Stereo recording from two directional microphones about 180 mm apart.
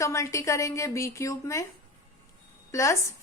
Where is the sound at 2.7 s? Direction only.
15° left (ahead or behind).